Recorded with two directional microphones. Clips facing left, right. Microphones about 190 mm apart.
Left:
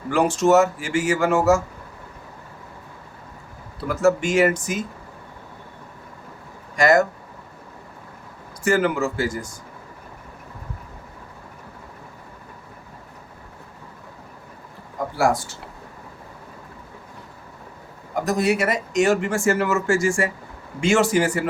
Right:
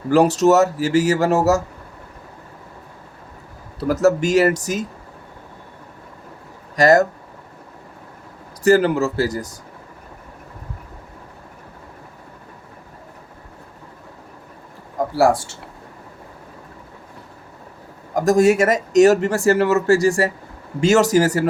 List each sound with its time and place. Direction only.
0.1 s speech: 40° right (ahead or behind)
3.8 s speech: 40° right (ahead or behind)
6.7 s speech: 35° right (ahead or behind)
8.6 s speech: 35° right (ahead or behind)
15.1 s speech: 30° right (ahead or behind)
18.1 s speech: 45° right (ahead or behind)